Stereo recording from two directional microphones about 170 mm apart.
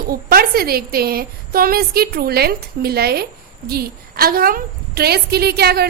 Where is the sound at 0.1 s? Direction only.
60° right (ahead or behind).